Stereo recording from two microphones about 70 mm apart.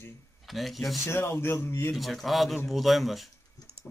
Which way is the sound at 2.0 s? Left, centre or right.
Centre.